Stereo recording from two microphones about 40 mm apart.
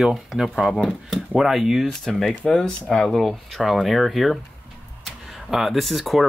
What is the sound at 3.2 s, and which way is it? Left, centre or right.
Speech, centre.